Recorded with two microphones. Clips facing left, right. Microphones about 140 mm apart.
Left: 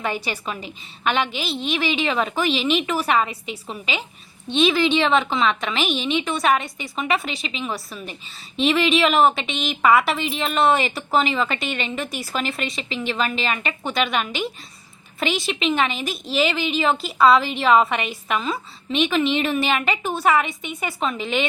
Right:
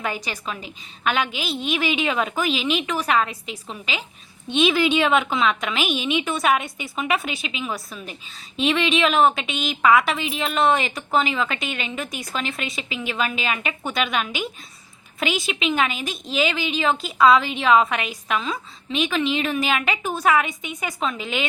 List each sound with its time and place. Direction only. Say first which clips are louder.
0.0 s a woman's voice: left 2 dB; centre (ahead or behind)